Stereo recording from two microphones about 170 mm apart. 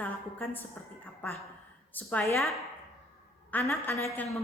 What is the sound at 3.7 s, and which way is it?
Speech, 15° left (ahead or behind).